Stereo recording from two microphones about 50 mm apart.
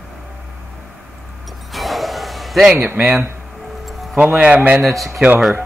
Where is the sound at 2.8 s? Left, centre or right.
Right.